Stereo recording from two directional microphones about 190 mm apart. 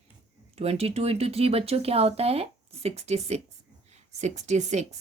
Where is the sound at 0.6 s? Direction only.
35° right (ahead or behind).